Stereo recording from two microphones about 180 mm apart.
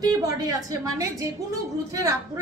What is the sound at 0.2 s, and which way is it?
A child's voice, 20° right (ahead or behind).